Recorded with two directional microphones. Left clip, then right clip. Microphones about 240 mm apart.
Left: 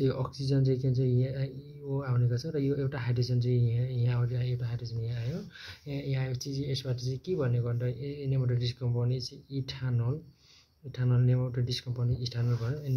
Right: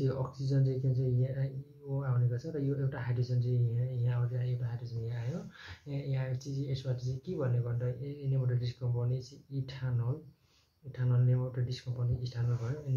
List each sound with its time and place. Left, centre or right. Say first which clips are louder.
0.0 s speech: left 5 dB; left
5.9 s speech: left 4 dB; left